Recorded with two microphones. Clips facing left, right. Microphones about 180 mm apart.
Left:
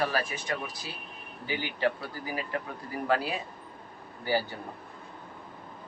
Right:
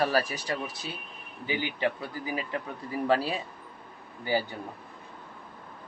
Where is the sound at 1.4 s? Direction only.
15° right (ahead or behind).